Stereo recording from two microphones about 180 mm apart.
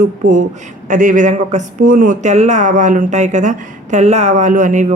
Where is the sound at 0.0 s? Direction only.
45° right (ahead or behind).